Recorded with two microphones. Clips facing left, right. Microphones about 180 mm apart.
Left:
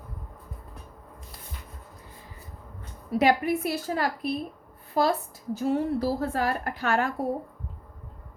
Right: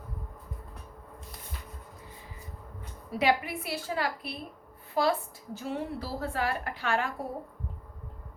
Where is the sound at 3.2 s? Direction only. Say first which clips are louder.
Left 5 dB; 45° left (ahead or behind).